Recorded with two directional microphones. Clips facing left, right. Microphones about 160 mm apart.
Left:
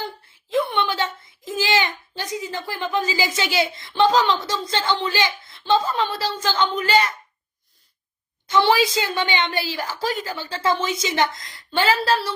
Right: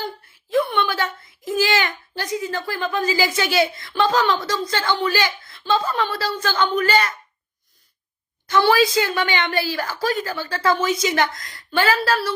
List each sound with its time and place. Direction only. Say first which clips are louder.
0.5 s a child's voice: right 1 dB; 20° left (ahead or behind)
8.4 s a woman's voice: right 1 dB; 20° left (ahead or behind)